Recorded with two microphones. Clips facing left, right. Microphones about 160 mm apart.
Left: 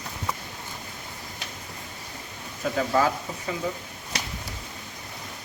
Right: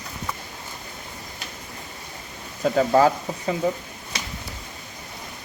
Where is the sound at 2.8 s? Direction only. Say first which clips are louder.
Right 6 dB; 40° right (ahead or behind).